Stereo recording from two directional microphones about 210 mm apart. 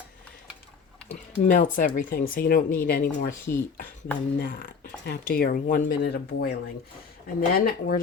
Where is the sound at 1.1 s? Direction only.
40° left (ahead or behind).